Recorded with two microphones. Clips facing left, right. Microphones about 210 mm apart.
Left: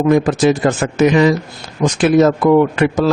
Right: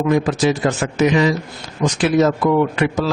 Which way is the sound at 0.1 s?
50° left (ahead or behind).